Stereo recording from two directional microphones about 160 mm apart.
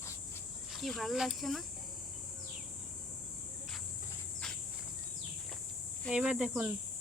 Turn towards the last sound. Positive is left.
turn(degrees=-5)  # may be behind; listen again after turning